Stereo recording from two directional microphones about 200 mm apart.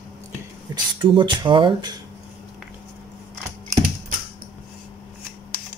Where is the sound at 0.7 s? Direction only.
25° right (ahead or behind).